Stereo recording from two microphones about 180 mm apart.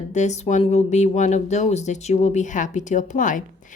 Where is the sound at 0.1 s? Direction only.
40° left (ahead or behind).